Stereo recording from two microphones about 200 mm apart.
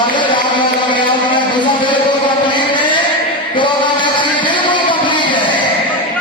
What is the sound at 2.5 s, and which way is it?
Chant, 25° left (ahead or behind).